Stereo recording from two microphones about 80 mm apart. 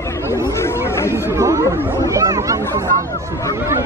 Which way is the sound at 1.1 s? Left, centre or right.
Right.